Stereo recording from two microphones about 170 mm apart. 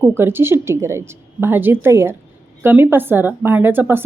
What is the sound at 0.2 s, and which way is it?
Speech, 15° right (ahead or behind).